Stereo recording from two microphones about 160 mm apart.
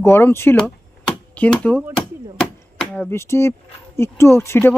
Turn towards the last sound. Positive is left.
turn(degrees=15)  # may be behind; listen again after turning